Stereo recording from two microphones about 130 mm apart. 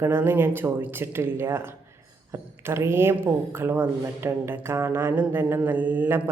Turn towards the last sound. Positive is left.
turn(degrees=-15)  # may be behind; listen again after turning